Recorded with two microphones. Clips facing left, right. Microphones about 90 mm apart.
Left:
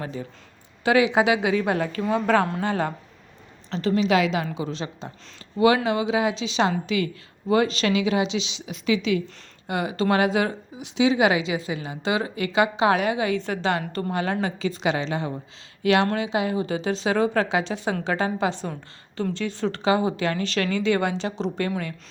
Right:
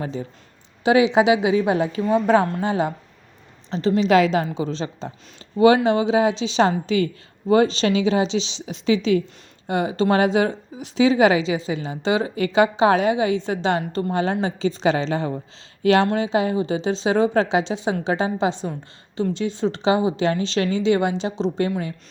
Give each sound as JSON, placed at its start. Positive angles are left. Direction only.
{"t": 0.0, "sound": "a woman's voice", "side_deg": -30}
{"t": 3.9, "sound": "a woman's voice", "side_deg": -35}
{"t": 10.8, "sound": "a woman's voice", "side_deg": -40}